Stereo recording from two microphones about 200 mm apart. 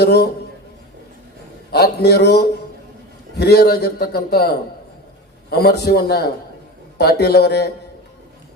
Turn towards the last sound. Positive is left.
turn(degrees=55)  # may be behind; listen again after turning